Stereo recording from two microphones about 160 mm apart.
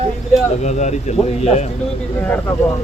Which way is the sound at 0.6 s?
45° left (ahead or behind).